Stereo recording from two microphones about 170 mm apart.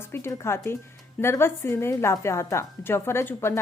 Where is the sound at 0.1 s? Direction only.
15° left (ahead or behind).